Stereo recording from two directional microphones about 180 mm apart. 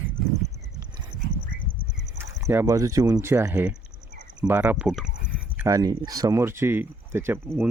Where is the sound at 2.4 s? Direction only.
15° right (ahead or behind).